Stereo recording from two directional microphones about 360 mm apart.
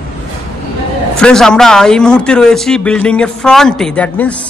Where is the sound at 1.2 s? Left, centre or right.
Centre.